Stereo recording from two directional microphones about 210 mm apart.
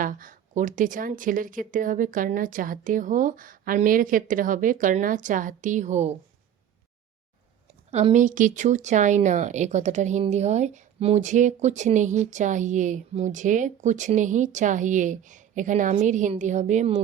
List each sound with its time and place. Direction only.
0.0 s speech: 40° right (ahead or behind)
7.7 s speech: 30° right (ahead or behind)